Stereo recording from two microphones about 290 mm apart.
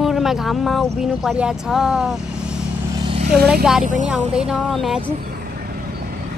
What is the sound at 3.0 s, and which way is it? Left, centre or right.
Vehicle, centre.